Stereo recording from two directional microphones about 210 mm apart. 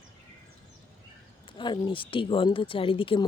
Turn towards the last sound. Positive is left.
turn(degrees=25)  # may be behind; listen again after turning